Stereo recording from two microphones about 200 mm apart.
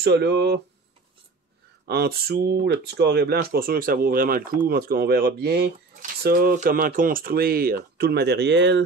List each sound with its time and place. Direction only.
0.0 s speech: 55° right (ahead or behind)
1.9 s speech: 50° right (ahead or behind)